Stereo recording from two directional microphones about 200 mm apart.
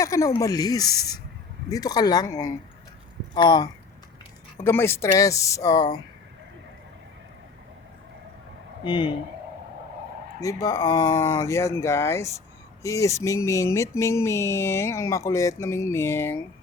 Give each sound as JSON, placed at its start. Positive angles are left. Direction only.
{"t": 0.0, "sound": "speech", "side_deg": 15}
{"t": 8.8, "sound": "speech", "side_deg": 25}
{"t": 10.4, "sound": "speech", "side_deg": 15}